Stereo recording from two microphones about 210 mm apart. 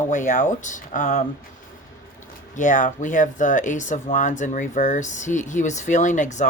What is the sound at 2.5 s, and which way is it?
Speech, 35° left (ahead or behind).